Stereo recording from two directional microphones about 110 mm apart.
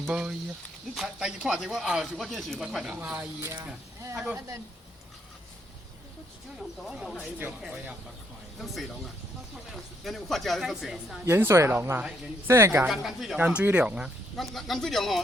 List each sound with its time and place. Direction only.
0.1 s speech: 10° right (ahead or behind)
3.4 s speech: 25° right (ahead or behind)
4.1 s speech: 10° right (ahead or behind)
6.6 s speech: centre (ahead or behind)
10.0 s speech: centre (ahead or behind)
11.3 s speech: 25° right (ahead or behind)
12.9 s speech: 5° right (ahead or behind)
13.4 s speech: 10° right (ahead or behind)
14.3 s speech: centre (ahead or behind)